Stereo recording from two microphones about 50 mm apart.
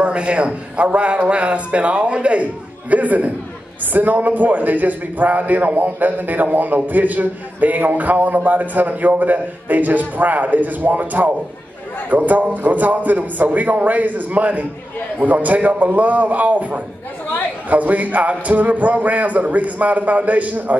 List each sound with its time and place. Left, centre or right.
0.0 s a man's voice: right